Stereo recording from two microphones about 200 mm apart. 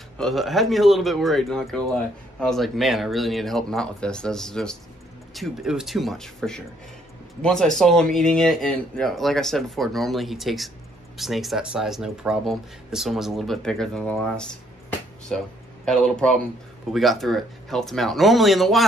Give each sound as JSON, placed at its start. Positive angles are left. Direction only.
{"t": 0.2, "sound": "speech", "side_deg": 0}